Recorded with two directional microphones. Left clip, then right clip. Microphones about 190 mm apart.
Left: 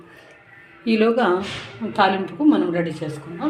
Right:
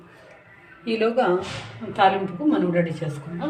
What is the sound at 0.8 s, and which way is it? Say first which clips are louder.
Speech: left 3 dB; 40° left (ahead or behind).